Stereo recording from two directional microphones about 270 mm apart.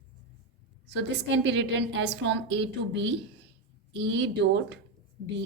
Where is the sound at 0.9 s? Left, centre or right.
Right.